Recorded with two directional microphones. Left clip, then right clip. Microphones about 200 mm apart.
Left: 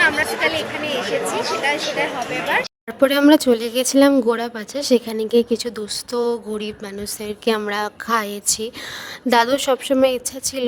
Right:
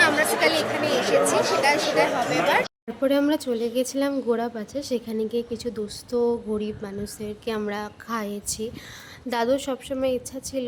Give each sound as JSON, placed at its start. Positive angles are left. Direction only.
{"t": 0.0, "sound": "chatter", "side_deg": -5}
{"t": 3.0, "sound": "speech", "side_deg": 50}